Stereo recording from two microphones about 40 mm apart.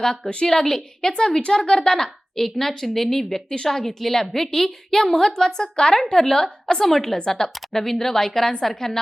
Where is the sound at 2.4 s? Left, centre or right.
Centre.